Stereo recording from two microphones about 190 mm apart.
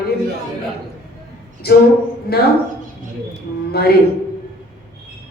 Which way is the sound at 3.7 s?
55° left (ahead or behind).